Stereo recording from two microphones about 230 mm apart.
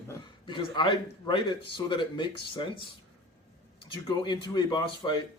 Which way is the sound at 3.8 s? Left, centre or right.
Centre.